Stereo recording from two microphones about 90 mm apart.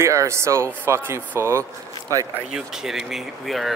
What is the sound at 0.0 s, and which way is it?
Speech, 35° right (ahead or behind).